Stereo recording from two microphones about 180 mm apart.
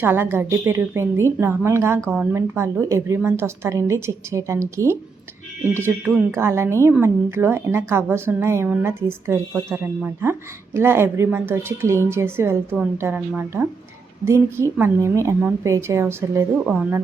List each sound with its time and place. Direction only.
0.0 s a woman's voice: 10° right (ahead or behind)
16.6 s speech: 5° right (ahead or behind)